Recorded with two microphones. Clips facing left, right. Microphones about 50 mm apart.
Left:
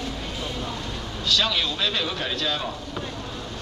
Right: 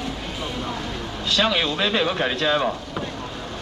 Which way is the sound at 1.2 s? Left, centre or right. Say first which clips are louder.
Right 3 dB; right.